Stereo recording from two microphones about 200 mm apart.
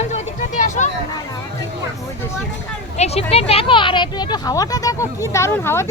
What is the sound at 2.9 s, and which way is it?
Speech, 30° left (ahead or behind).